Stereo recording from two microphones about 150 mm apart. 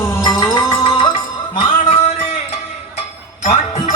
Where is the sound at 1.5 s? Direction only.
35° left (ahead or behind).